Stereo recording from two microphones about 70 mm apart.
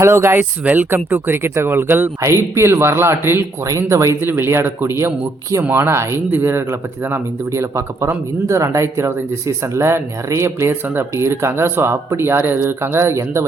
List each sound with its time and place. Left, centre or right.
0.0 s speech: right
0.6 s speech: right
2.2 s speech: right
4.2 s speech: right